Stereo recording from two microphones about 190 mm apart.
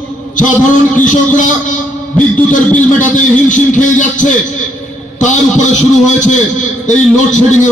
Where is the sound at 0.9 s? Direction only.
45° left (ahead or behind).